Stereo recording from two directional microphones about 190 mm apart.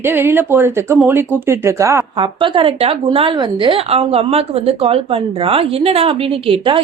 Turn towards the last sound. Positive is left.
turn(degrees=-30)  # may be behind; listen again after turning